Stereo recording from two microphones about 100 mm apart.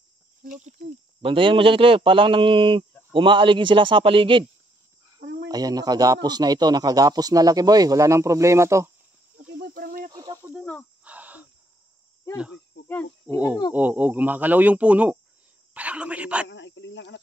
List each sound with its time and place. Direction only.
1.2 s a man's voice: 60° right (ahead or behind)
5.5 s speech: 40° right (ahead or behind)
10.1 s cricket: 40° right (ahead or behind)
11.1 s a sound: 15° right (ahead or behind)
12.8 s speech: 20° left (ahead or behind)
13.7 s a man's voice: 15° right (ahead or behind)